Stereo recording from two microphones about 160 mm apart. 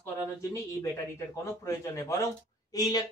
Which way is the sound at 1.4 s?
20° left (ahead or behind).